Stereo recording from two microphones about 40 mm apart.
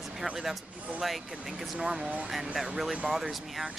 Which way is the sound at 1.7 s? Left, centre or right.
Right.